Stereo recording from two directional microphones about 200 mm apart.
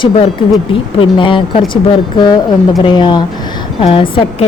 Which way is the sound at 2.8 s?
25° left (ahead or behind).